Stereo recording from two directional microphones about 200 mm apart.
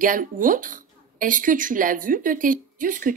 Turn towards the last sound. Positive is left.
turn(degrees=-40)  # may be behind; listen again after turning